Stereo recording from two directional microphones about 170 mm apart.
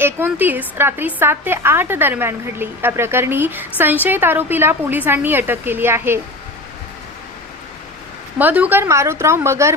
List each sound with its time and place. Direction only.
0.0 s a woman's voice: 10° right (ahead or behind)
8.4 s a woman's voice: 10° right (ahead or behind)